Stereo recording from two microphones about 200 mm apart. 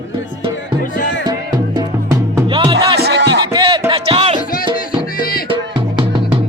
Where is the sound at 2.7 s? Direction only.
60° right (ahead or behind).